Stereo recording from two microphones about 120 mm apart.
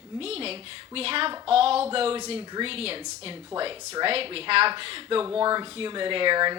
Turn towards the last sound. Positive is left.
turn(degrees=-40)  # may be behind; listen again after turning